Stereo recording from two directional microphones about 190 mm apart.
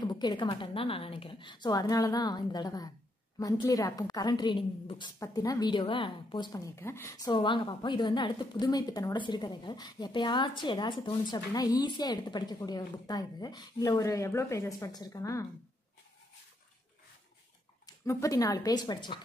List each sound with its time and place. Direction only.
0.0 s a woman's voice: 20° left (ahead or behind)
17.8 s a woman's voice: 15° left (ahead or behind)